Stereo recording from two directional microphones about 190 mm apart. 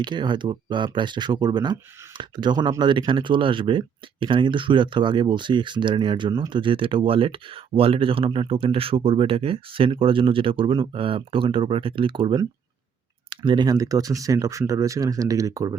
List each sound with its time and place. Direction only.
0.0 s speech: 25° right (ahead or behind)